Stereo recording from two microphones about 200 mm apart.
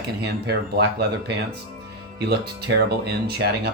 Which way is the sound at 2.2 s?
55° right (ahead or behind).